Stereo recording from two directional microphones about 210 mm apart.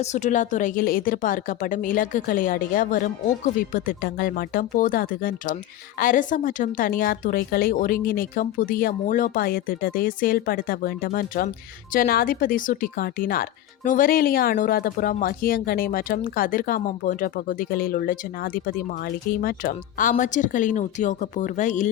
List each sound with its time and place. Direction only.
0.0 s speech: 35° left (ahead or behind)